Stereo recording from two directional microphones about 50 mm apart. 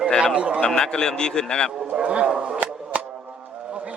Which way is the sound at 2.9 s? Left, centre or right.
Right.